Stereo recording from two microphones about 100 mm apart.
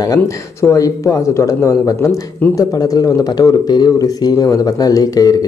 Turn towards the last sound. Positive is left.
turn(degrees=40)  # may be behind; listen again after turning